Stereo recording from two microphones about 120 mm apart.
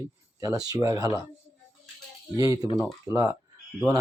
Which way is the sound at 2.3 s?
30° right (ahead or behind).